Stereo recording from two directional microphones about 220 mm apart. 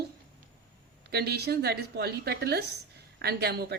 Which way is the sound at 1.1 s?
45° right (ahead or behind).